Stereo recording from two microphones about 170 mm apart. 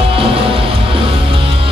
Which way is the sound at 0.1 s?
30° right (ahead or behind).